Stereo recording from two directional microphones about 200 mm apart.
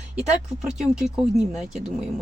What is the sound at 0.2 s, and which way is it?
Speech, centre (ahead or behind).